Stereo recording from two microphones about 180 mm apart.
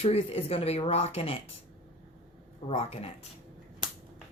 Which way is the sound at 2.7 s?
35° left (ahead or behind).